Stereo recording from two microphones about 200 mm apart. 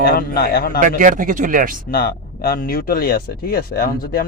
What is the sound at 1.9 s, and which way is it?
Speech, 50° left (ahead or behind).